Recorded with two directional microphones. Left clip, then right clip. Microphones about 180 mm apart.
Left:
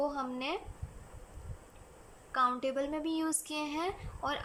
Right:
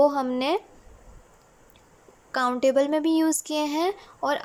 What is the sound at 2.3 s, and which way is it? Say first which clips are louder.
Speech: right 8 dB; 40° right (ahead or behind).